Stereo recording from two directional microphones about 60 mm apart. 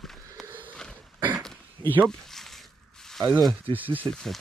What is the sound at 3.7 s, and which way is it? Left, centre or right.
Speech, right.